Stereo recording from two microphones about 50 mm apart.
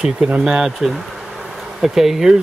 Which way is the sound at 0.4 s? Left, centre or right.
Centre.